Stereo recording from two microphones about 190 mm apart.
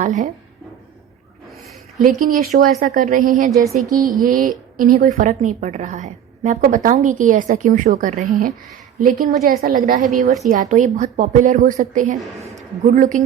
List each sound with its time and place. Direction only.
0.0 s speech: 40° right (ahead or behind)
2.0 s a woman's voice: 45° right (ahead or behind)